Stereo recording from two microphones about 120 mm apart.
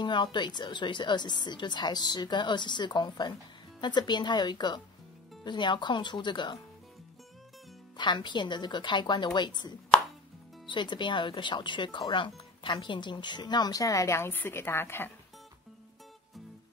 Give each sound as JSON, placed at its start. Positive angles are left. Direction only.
{"t": 0.0, "sound": "speech", "side_deg": 40}
{"t": 8.0, "sound": "speech", "side_deg": 40}